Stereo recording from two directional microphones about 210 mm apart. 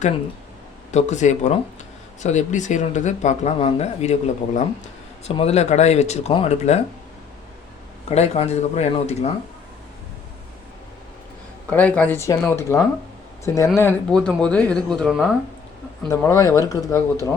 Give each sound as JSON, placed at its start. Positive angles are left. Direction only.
{"t": 0.9, "sound": "speech", "side_deg": 35}
{"t": 8.1, "sound": "speech", "side_deg": 30}
{"t": 11.7, "sound": "speech", "side_deg": 5}
{"t": 16.0, "sound": "speech", "side_deg": 15}